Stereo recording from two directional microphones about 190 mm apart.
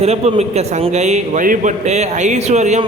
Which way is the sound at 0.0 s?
35° right (ahead or behind).